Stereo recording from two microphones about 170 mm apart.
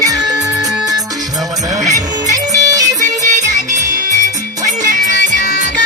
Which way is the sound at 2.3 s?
20° right (ahead or behind).